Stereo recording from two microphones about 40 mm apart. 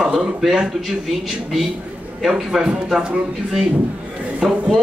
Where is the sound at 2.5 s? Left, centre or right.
Centre.